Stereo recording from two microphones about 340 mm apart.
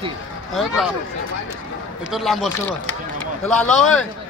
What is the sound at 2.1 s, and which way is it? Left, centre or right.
Speech, centre.